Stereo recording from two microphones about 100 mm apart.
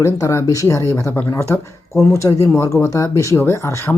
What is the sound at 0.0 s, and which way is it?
Speech, 30° left (ahead or behind).